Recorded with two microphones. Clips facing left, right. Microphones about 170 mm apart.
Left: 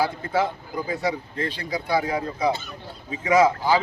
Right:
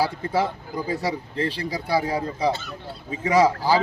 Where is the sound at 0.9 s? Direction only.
35° right (ahead or behind).